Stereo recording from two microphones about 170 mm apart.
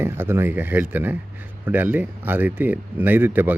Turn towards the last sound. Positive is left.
turn(degrees=-10)  # may be behind; listen again after turning